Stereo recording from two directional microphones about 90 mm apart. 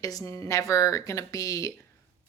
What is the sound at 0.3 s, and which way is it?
Speech, 35° left (ahead or behind).